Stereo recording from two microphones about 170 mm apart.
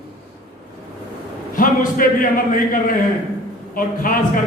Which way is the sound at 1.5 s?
55° left (ahead or behind).